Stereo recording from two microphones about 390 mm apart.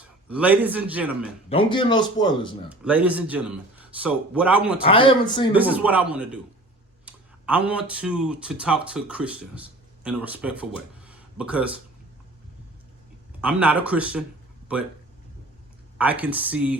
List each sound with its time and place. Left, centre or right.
0.3 s a man's voice: centre
1.5 s speech: centre
2.6 s a man's voice: centre
4.8 s speech: centre
5.5 s a man's voice: centre
10.8 s a sound: centre
13.4 s a man's voice: centre
16.0 s a man's voice: centre